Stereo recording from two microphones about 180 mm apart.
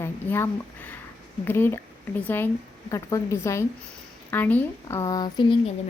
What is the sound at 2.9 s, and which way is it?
A woman's voice, 20° left (ahead or behind).